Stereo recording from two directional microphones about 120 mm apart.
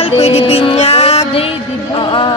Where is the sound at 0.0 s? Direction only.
60° left (ahead or behind).